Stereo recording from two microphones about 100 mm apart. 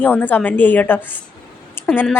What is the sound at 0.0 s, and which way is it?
A woman's voice, 15° left (ahead or behind).